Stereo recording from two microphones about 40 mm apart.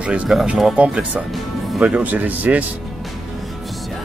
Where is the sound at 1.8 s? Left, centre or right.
Right.